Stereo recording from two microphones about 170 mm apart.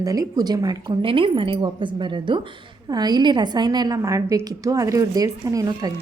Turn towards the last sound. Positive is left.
turn(degrees=-20)  # may be behind; listen again after turning